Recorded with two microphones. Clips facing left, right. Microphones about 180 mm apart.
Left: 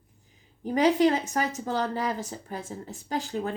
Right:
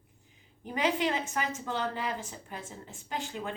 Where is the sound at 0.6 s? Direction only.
40° left (ahead or behind).